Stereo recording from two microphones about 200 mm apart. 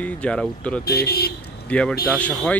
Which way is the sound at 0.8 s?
50° left (ahead or behind).